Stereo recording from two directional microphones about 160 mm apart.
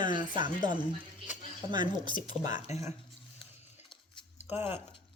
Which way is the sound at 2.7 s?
45° left (ahead or behind).